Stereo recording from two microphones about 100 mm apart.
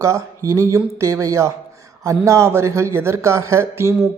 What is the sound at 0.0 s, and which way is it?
Speech, 30° right (ahead or behind).